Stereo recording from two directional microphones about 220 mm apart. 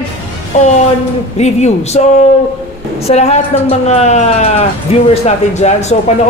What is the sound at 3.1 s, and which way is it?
Speech, 30° left (ahead or behind).